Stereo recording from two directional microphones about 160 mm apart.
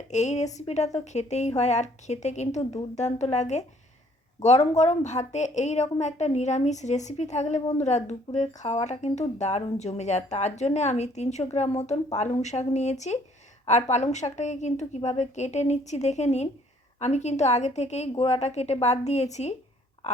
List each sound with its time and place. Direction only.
0.1 s a woman's voice: 45° left (ahead or behind)